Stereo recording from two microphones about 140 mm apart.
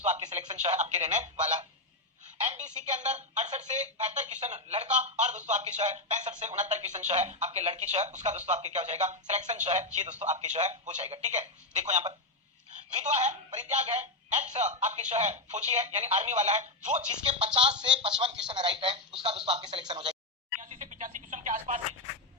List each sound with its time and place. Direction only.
0.0 s speech: 55° right (ahead or behind)
17.3 s speech: 40° right (ahead or behind)
20.6 s telephone: 65° right (ahead or behind)